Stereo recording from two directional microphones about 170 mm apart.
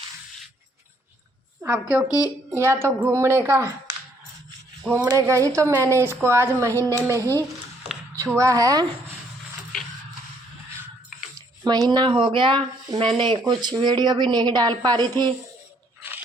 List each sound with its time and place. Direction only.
1.6 s a woman's voice: 10° right (ahead or behind)
2.0 s speech: 20° left (ahead or behind)
2.5 s a woman's voice: 15° right (ahead or behind)
5.0 s a woman's voice: 20° right (ahead or behind)
8.4 s speech: 20° right (ahead or behind)
11.3 s speech: 20° right (ahead or behind)